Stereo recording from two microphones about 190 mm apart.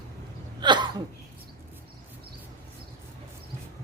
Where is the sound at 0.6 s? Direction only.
25° right (ahead or behind).